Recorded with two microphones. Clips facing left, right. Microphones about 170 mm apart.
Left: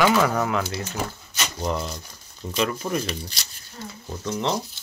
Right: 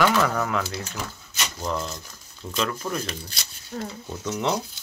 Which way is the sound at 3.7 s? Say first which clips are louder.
Right 6 dB; 55° right (ahead or behind).